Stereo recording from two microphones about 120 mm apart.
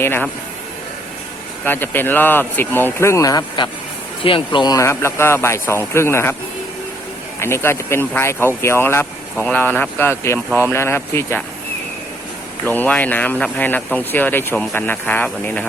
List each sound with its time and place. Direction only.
0.0 s speech: 20° left (ahead or behind)
1.6 s speech: 15° left (ahead or behind); by 3.7 s 35° left (ahead or behind)
4.2 s speech: 45° left (ahead or behind)
4.9 s speech: 20° left (ahead or behind)
7.3 s speech: 20° left (ahead or behind)
12.6 s speech: 15° left (ahead or behind)